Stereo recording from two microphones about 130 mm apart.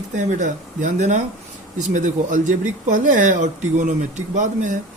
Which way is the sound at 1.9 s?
90° right.